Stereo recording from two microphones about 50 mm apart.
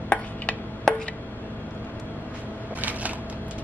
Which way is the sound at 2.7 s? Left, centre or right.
Right.